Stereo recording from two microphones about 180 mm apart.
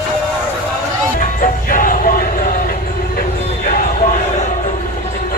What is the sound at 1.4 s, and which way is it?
Music, 50° left (ahead or behind).